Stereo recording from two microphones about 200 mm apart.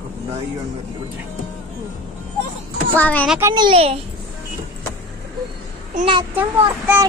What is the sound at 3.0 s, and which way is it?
Speech, 10° left (ahead or behind).